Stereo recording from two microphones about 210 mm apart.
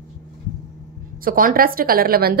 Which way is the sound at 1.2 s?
40° right (ahead or behind).